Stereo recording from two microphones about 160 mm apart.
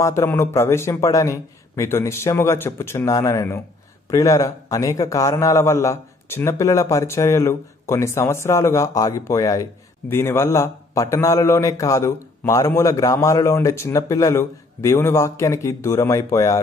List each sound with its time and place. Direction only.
0.0 s a man's voice: 15° left (ahead or behind)